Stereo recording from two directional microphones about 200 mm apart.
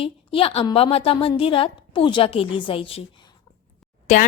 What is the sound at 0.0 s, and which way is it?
A woman's voice, 30° left (ahead or behind).